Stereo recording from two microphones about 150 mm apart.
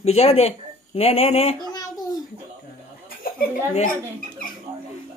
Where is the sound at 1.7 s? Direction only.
25° left (ahead or behind).